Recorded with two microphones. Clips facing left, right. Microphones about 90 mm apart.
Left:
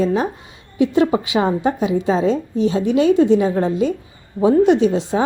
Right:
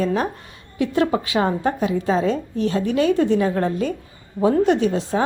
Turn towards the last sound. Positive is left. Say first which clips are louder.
# left 3 dB
turn(degrees=15)  # may be behind; listen again after turning